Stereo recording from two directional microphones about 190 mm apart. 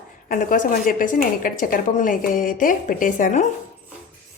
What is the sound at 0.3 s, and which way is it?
A woman's voice, 45° left (ahead or behind).